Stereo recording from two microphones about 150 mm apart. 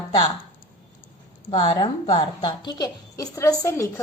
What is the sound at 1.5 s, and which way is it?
A woman's voice, 35° left (ahead or behind).